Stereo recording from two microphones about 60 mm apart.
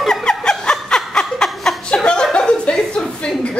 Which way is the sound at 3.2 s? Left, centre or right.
Centre.